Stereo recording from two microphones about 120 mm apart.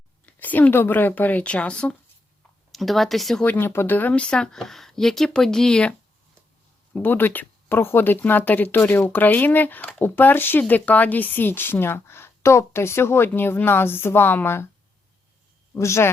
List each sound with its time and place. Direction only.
0.3 s speech: 15° left (ahead or behind)
3.4 s speech: 15° left (ahead or behind)
15.7 s speech: 25° left (ahead or behind)